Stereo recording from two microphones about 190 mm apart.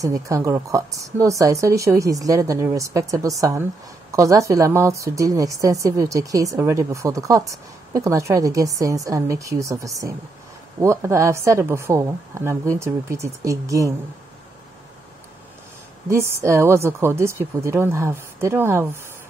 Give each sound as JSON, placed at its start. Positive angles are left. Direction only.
{"t": 0.0, "sound": "a woman's voice", "side_deg": -15}
{"t": 16.1, "sound": "a woman's voice", "side_deg": -15}